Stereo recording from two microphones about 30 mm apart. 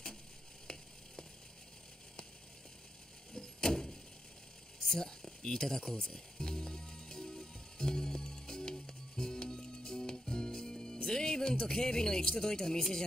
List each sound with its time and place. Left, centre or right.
3.3 s door: centre
4.8 s speech: centre
6.1 s music: left